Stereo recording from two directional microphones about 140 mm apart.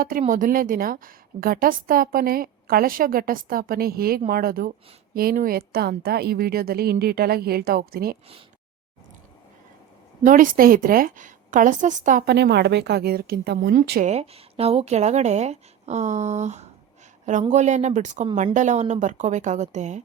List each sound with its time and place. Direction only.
0.0 s a woman's voice: 85° right
10.2 s a woman's voice: 75° right (ahead or behind)
13.0 s speech: 90° right; by 20.0 s 55° right (ahead or behind)